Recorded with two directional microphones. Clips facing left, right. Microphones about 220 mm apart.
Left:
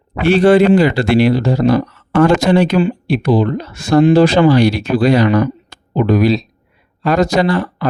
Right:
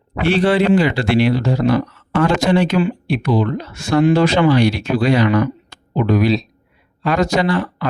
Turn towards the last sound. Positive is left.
turn(degrees=40)  # may be behind; listen again after turning